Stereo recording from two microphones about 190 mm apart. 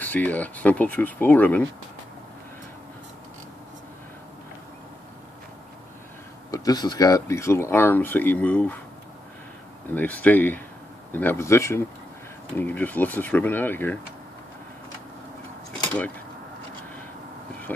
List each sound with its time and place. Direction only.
0.0 s speech: 10° left (ahead or behind)
6.5 s speech: 20° left (ahead or behind)
9.9 s speech: 10° left (ahead or behind)
17.7 s a sound: 10° left (ahead or behind)